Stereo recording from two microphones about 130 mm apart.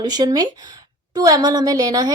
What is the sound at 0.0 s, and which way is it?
Speech, 30° right (ahead or behind).